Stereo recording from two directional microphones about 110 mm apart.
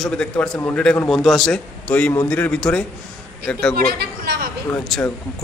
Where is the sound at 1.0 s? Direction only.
Centre (ahead or behind).